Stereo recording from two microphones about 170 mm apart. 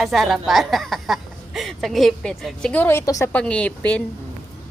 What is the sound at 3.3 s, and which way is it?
Speech, 5° left (ahead or behind).